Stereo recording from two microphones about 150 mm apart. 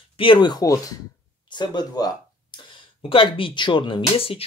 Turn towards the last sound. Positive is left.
turn(degrees=40)  # may be behind; listen again after turning